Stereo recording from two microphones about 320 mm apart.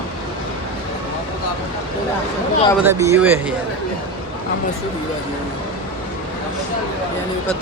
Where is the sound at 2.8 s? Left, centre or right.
Centre.